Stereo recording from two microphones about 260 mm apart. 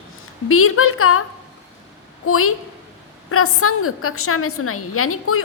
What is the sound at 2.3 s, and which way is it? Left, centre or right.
A woman's voice, left.